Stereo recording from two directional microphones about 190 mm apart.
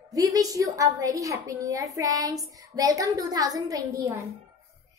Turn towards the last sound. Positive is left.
turn(degrees=-20)  # may be behind; listen again after turning